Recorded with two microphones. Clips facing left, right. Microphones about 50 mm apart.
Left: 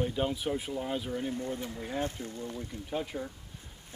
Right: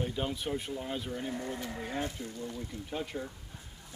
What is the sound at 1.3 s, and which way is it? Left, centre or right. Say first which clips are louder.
Speech: left 2 dB; right.